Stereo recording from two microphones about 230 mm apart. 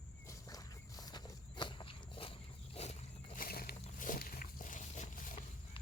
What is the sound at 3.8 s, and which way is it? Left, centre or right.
Wild animals, left.